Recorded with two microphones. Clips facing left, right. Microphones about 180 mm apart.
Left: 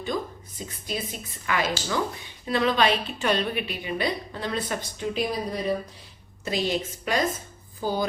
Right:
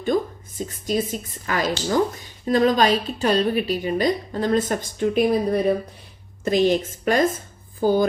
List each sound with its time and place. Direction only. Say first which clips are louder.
0.1 s a woman's voice: right 8 dB; 50° right (ahead or behind)